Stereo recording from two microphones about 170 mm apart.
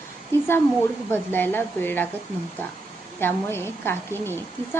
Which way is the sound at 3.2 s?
15° left (ahead or behind).